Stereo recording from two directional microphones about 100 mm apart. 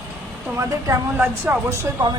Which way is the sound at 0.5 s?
25° right (ahead or behind).